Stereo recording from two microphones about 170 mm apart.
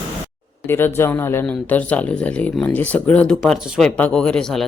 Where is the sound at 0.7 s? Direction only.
15° left (ahead or behind).